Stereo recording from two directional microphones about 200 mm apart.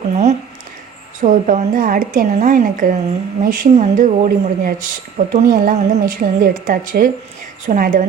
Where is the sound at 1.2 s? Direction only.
40° right (ahead or behind).